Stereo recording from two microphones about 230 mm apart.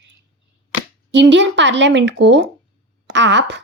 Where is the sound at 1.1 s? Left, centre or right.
Right.